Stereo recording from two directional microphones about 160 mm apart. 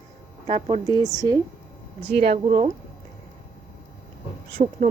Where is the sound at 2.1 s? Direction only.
70° right (ahead or behind).